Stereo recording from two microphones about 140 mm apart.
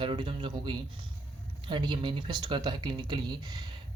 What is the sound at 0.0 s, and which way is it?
Speech, 35° right (ahead or behind).